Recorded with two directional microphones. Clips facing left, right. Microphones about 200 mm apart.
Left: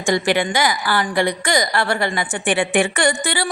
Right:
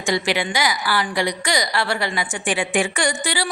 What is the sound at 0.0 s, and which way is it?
A woman's voice, 50° left (ahead or behind).